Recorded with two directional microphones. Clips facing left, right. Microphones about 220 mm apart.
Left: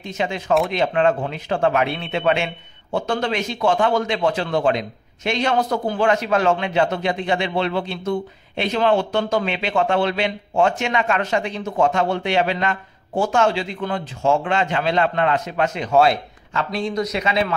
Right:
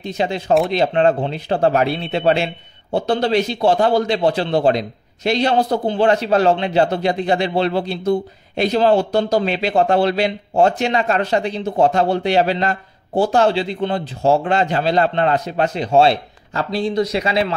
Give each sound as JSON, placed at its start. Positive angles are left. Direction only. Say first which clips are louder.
{"t": 0.0, "sound": "speech", "louder": "right 4 dB", "side_deg": -35}